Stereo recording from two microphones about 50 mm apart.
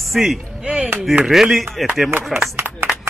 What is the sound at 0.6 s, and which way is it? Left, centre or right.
Speech, right.